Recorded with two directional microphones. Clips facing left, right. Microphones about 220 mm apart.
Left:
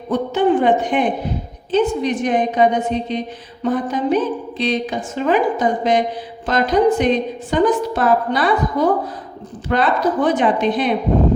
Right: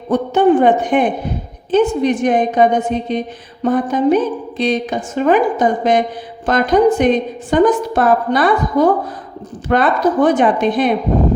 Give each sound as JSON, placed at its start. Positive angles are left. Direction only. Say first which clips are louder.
{"t": 0.1, "sound": "a woman's voice", "louder": "right 4 dB", "side_deg": -50}